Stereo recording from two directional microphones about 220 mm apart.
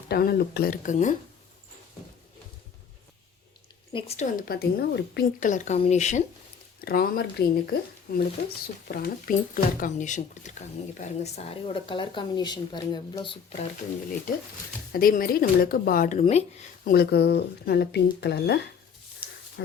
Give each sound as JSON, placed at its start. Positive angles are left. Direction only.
{"t": 0.1, "sound": "speech", "side_deg": 45}
{"t": 3.9, "sound": "speech", "side_deg": 25}
{"t": 4.4, "sound": "speech", "side_deg": 45}
{"t": 6.8, "sound": "speech", "side_deg": 45}
{"t": 14.9, "sound": "speech", "side_deg": 40}
{"t": 16.9, "sound": "speech", "side_deg": 45}
{"t": 19.6, "sound": "dog", "side_deg": 55}